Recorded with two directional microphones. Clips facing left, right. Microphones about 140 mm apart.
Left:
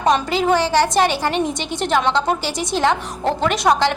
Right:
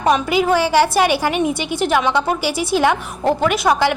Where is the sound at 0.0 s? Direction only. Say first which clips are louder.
Right 1 dB; 10° right (ahead or behind).